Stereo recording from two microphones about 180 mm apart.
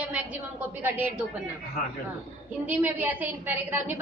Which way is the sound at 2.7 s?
10° right (ahead or behind).